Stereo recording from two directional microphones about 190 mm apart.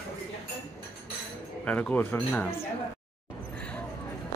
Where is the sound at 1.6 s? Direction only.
5° left (ahead or behind).